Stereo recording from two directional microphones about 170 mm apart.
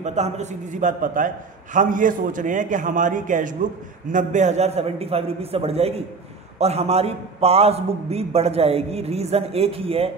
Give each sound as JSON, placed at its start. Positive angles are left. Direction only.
{"t": 0.0, "sound": "a man's voice", "side_deg": -40}